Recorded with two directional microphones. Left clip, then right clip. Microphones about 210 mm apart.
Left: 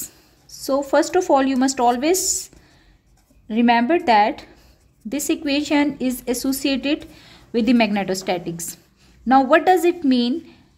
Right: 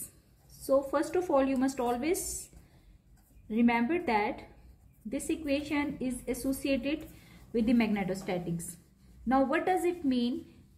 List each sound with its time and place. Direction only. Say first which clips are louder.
0.5 s a woman's voice: left 8 dB; 55° left (ahead or behind)
3.4 s a woman's voice: left 12 dB; 55° left (ahead or behind)